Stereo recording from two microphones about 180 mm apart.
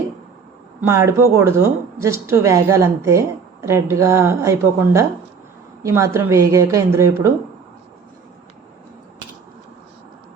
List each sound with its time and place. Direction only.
0.8 s speech: 15° right (ahead or behind)